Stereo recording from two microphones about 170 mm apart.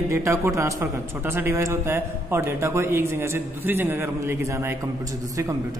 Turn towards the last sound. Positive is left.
turn(degrees=-15)  # may be behind; listen again after turning